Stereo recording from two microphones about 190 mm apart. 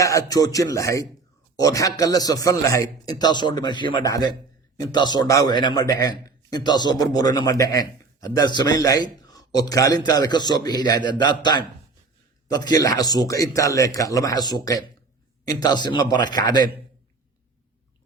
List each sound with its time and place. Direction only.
0.0 s a man's voice: 15° left (ahead or behind)